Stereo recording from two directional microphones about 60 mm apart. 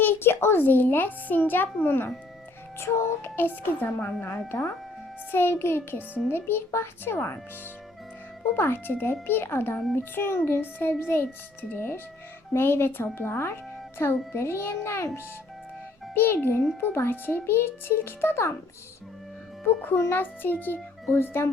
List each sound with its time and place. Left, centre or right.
0.0 s a child's voice: left
8.5 s a child's voice: left
19.6 s a child's voice: left